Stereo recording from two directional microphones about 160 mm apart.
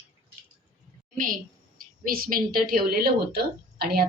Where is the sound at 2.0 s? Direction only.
65° right (ahead or behind).